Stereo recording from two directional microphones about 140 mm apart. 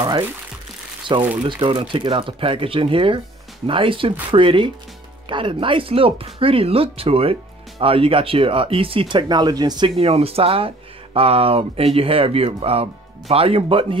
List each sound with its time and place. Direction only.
1.1 s speech: 35° right (ahead or behind)